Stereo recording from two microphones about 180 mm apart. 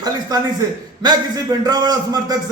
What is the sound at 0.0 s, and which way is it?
A man's voice, 20° right (ahead or behind).